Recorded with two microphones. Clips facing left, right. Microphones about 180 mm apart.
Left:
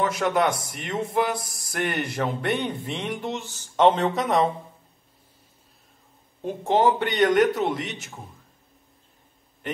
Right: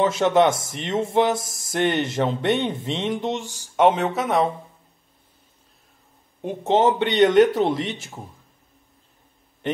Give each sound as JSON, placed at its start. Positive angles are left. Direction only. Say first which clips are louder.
{"t": 0.0, "sound": "speech", "louder": "right 5 dB", "side_deg": -25}
{"t": 6.4, "sound": "speech", "louder": "right 2 dB", "side_deg": -20}